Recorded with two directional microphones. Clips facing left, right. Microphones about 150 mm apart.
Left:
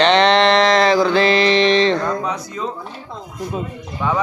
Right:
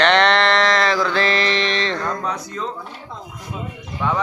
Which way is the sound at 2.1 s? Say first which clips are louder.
Left 3 dB; 10° left (ahead or behind).